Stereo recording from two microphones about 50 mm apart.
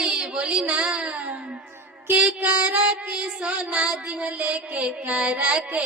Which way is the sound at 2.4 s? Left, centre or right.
Right.